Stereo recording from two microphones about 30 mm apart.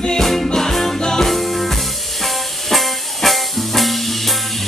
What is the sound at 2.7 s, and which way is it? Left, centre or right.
Music, centre.